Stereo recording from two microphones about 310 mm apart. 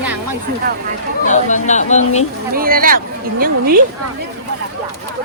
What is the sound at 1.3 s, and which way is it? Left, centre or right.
Speech, left.